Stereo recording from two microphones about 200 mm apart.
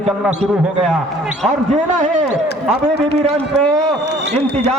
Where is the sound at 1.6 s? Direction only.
35° right (ahead or behind).